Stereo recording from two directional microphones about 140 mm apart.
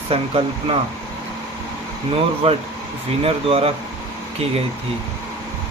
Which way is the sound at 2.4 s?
45° right (ahead or behind).